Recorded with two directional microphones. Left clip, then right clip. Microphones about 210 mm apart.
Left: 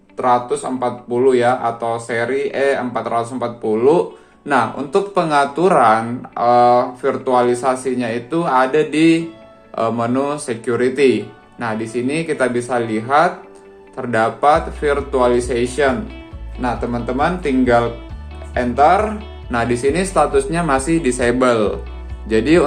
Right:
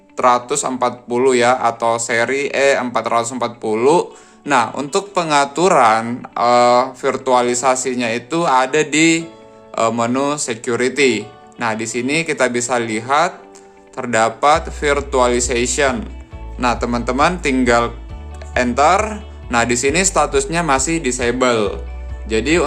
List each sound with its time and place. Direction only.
0.2 s speech: 35° right (ahead or behind); by 22.6 s 10° right (ahead or behind)